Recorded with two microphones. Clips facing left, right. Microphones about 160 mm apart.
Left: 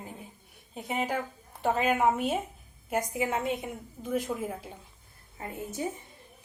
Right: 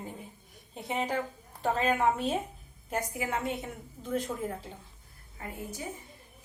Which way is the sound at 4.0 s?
10° left (ahead or behind).